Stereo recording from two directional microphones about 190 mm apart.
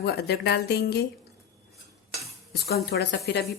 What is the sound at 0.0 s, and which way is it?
A woman's voice, 60° left (ahead or behind).